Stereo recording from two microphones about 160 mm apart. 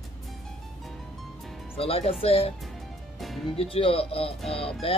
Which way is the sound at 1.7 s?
35° left (ahead or behind).